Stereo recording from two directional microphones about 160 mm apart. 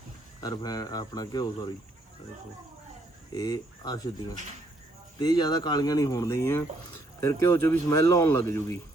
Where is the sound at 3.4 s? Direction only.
25° left (ahead or behind).